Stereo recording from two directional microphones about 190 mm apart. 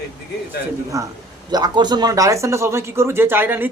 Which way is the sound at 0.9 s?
15° right (ahead or behind).